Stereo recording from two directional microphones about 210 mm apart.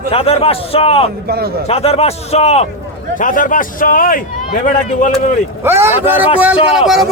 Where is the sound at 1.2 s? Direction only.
45° right (ahead or behind).